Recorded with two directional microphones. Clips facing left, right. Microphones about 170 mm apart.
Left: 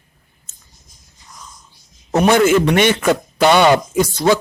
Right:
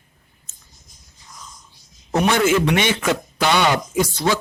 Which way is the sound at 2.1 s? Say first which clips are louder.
Left 5 dB; 45° left (ahead or behind).